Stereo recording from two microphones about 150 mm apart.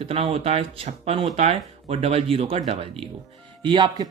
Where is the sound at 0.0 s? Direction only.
40° right (ahead or behind).